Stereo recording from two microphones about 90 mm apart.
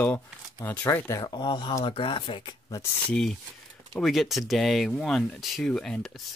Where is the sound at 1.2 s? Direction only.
60° left (ahead or behind).